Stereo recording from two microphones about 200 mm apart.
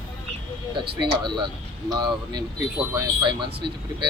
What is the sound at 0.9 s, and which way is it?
Speech, 20° right (ahead or behind).